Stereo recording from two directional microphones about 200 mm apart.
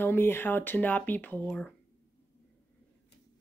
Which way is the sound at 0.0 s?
10° left (ahead or behind).